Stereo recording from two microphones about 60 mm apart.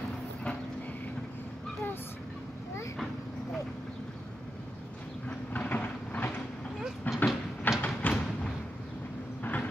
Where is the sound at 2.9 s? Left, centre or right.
Centre.